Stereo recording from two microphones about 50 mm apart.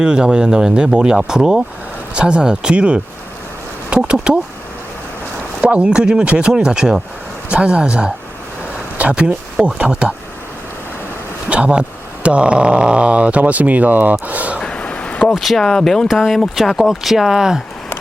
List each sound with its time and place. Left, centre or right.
0.0 s speech: centre
5.6 s speech: centre
11.4 s speech: right
14.6 s a sound: left
15.4 s speech: centre